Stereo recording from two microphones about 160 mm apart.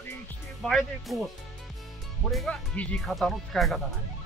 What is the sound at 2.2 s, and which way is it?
Speech, centre (ahead or behind).